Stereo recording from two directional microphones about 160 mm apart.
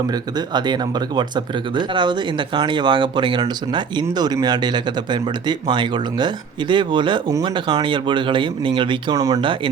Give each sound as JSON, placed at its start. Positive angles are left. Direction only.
{"t": 0.1, "sound": "speech", "side_deg": -25}